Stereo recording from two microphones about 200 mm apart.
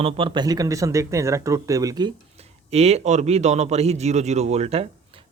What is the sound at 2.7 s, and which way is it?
A man's voice, 30° right (ahead or behind).